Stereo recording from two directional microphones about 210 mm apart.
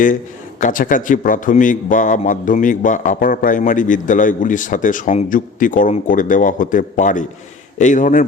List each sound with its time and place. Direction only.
0.6 s a man's voice: 40° left (ahead or behind)